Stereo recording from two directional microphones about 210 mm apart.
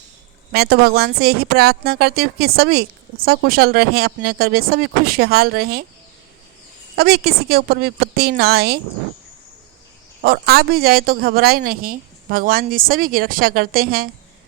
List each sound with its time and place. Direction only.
0.5 s speech: 50° right (ahead or behind)
6.9 s speech: 50° right (ahead or behind)
10.2 s speech: 50° right (ahead or behind)